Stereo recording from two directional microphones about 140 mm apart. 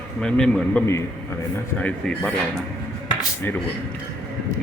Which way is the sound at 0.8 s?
20° left (ahead or behind).